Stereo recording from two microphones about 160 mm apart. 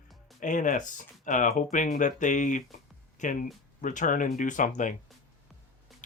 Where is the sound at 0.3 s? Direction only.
50° left (ahead or behind).